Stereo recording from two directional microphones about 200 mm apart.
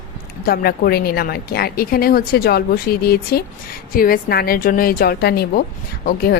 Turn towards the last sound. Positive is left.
turn(degrees=50)  # may be behind; listen again after turning